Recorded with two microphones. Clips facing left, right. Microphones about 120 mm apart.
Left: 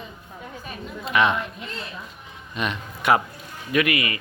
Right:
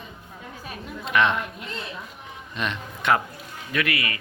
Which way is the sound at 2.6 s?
5° left (ahead or behind).